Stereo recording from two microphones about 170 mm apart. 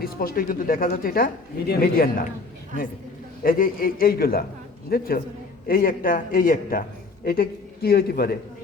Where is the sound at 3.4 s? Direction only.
55° left (ahead or behind).